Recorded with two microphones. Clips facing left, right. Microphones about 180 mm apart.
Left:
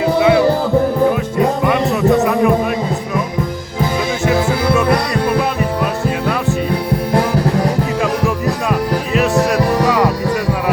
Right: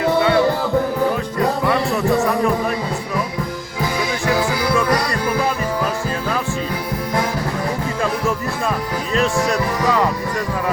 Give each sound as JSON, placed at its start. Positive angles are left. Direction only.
{"t": 0.0, "sound": "music", "side_deg": 10}
{"t": 4.3, "sound": "music", "side_deg": 25}
{"t": 9.6, "sound": "music", "side_deg": 70}